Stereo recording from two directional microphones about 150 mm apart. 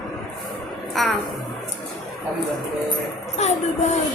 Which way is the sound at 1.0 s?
Centre (ahead or behind).